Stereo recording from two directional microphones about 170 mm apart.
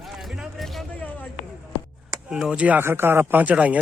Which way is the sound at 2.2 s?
5° right (ahead or behind).